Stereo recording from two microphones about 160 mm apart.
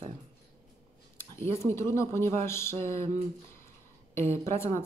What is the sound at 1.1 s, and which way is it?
Speech, 15° left (ahead or behind).